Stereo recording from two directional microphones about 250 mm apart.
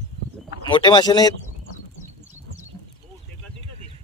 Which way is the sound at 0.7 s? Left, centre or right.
Centre.